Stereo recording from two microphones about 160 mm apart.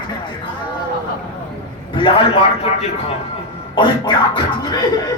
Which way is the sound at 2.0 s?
35° left (ahead or behind).